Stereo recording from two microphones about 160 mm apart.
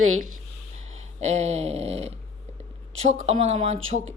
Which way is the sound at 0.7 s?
45° right (ahead or behind).